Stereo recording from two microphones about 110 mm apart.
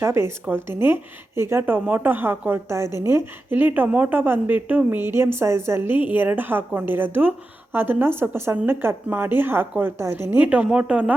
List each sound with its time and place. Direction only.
0.0 s a woman's voice: 25° right (ahead or behind)